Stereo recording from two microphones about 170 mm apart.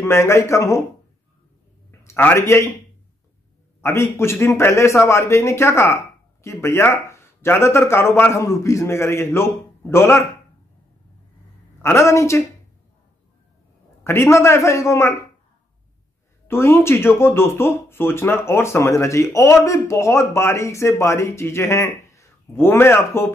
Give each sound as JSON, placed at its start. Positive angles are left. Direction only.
{"t": 0.0, "sound": "speech", "side_deg": 15}
{"t": 1.9, "sound": "a man's voice", "side_deg": 15}
{"t": 3.8, "sound": "speech", "side_deg": 15}
{"t": 11.8, "sound": "speech", "side_deg": 15}
{"t": 14.0, "sound": "speech", "side_deg": 15}
{"t": 16.4, "sound": "speech", "side_deg": 15}